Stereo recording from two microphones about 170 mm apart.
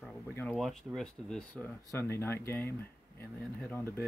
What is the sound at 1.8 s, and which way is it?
Speech, 15° left (ahead or behind).